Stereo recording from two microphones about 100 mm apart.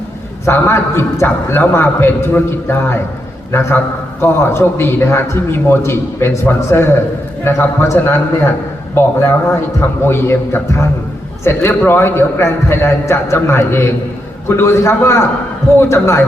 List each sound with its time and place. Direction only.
0.4 s a man's voice: 25° left (ahead or behind)